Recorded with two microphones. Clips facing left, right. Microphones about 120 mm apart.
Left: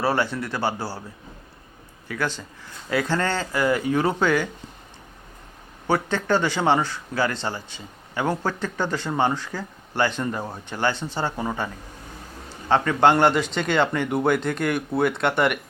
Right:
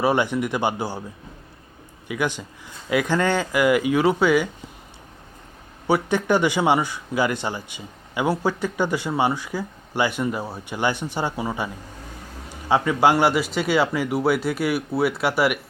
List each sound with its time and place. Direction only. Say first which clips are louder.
0.0 s speech: right 3 dB; 15° right (ahead or behind)
2.0 s speech: right 2 dB; 15° right (ahead or behind)
5.9 s speech: right 2 dB; 15° right (ahead or behind)